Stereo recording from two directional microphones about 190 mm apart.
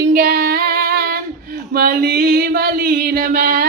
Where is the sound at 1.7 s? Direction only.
50° right (ahead or behind).